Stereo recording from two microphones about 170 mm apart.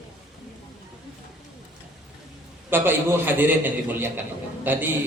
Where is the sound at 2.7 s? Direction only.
10° right (ahead or behind).